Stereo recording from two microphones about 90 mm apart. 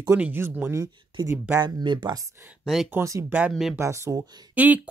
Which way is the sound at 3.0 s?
35° right (ahead or behind).